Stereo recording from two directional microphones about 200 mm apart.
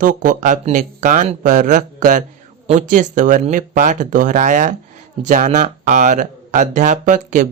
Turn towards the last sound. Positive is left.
turn(degrees=-40)  # may be behind; listen again after turning